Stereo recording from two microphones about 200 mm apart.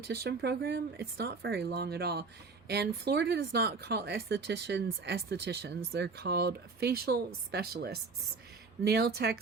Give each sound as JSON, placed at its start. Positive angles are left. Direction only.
{"t": 0.1, "sound": "speech", "side_deg": -55}